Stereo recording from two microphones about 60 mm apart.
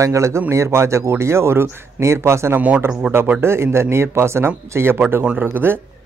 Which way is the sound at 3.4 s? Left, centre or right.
Right.